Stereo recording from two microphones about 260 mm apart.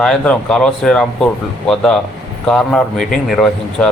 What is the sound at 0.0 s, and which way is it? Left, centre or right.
Speech, centre.